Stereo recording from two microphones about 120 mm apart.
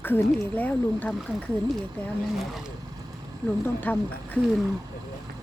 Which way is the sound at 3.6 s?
15° left (ahead or behind).